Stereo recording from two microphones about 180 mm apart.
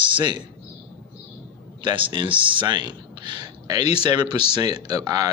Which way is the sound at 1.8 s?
25° right (ahead or behind).